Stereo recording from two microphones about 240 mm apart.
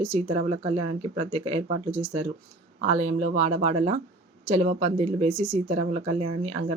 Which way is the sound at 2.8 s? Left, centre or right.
Right.